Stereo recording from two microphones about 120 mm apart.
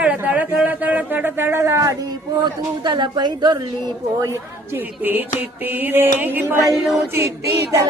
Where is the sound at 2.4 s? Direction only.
40° right (ahead or behind).